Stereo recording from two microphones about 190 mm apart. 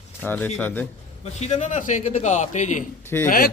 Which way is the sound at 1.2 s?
35° left (ahead or behind).